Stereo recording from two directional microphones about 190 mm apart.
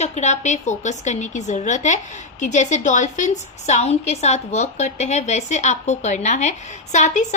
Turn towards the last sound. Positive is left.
turn(degrees=40)  # may be behind; listen again after turning